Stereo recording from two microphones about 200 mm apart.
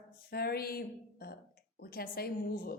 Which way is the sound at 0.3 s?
50° left (ahead or behind).